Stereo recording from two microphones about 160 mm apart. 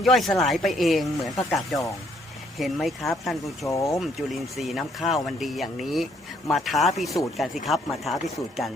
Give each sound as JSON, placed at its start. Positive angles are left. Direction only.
{"t": 0.0, "sound": "speech", "side_deg": 0}
{"t": 3.7, "sound": "speech", "side_deg": 20}
{"t": 3.9, "sound": "speech", "side_deg": 0}